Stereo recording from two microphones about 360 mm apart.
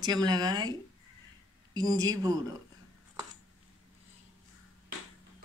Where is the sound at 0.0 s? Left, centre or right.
Centre.